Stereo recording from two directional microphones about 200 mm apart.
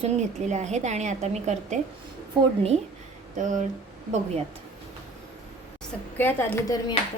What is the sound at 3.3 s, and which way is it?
Speech, 40° right (ahead or behind).